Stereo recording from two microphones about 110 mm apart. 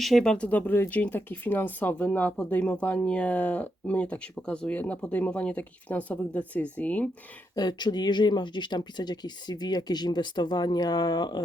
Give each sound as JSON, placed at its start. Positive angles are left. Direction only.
{"t": 0.0, "sound": "speech", "side_deg": 5}
{"t": 7.5, "sound": "speech", "side_deg": 40}